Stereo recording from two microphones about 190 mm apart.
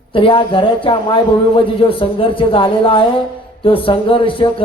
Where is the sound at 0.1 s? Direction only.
30° left (ahead or behind).